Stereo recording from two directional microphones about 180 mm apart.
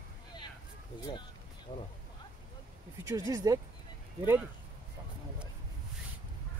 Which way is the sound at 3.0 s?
20° right (ahead or behind).